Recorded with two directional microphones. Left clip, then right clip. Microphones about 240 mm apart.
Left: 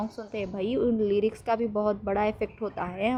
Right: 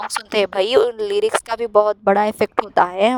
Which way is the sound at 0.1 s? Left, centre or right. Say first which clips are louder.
Right 15 dB; right.